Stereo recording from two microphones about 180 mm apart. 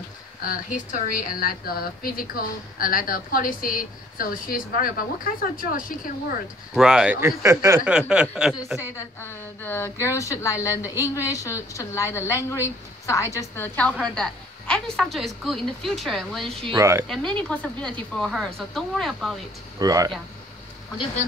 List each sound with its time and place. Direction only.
0.4 s a woman's voice: 50° left (ahead or behind)
6.7 s speech: 5° right (ahead or behind)
8.1 s a woman's voice: 5° right (ahead or behind)
9.2 s a woman's voice: 10° left (ahead or behind)
16.7 s speech: 15° right (ahead or behind)
17.1 s a woman's voice: 5° left (ahead or behind)
19.8 s speech: 20° right (ahead or behind)